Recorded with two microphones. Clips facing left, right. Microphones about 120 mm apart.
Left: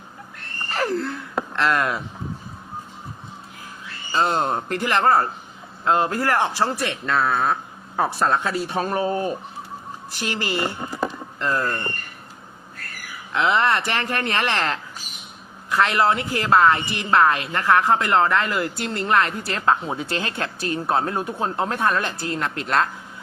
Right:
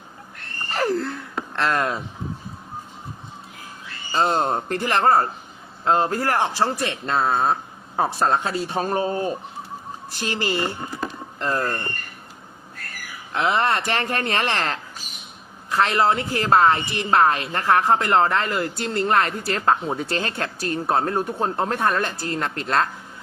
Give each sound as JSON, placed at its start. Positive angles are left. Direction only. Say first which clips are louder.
{"t": 0.8, "sound": "gasp", "louder": "right 1 dB", "side_deg": -35}
{"t": 4.1, "sound": "a woman's voice", "louder": "right 1 dB", "side_deg": -30}
{"t": 10.2, "sound": "a woman's voice", "louder": "right 1 dB", "side_deg": -35}
{"t": 13.3, "sound": "a woman's voice", "louder": "left 1 dB", "side_deg": -35}